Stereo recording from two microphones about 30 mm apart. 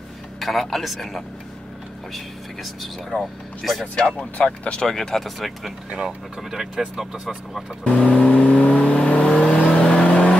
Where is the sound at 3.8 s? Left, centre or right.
Left.